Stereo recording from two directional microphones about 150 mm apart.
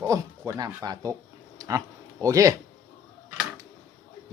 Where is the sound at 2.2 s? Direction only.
20° right (ahead or behind).